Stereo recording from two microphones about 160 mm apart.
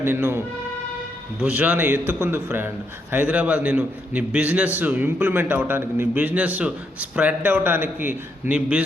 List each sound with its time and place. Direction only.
0.0 s a man's voice: 15° right (ahead or behind)